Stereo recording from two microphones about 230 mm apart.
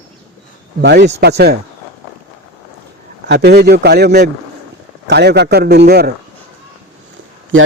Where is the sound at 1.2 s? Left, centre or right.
Right.